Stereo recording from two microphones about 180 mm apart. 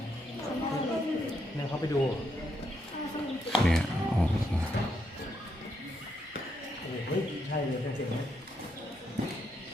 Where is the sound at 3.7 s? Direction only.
5° left (ahead or behind).